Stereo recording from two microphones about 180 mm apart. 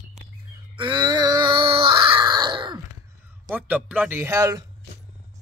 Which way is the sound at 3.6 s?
10° right (ahead or behind).